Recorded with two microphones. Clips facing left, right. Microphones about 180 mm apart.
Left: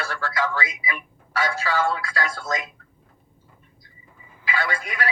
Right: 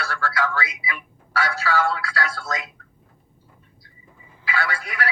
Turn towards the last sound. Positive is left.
turn(degrees=20)  # may be behind; listen again after turning